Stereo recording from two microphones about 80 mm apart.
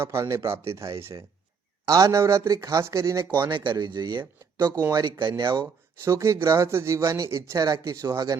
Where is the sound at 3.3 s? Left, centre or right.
Right.